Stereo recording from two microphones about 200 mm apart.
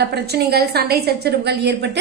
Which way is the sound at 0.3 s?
55° right (ahead or behind).